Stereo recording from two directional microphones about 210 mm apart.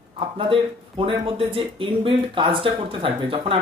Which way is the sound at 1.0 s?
25° right (ahead or behind).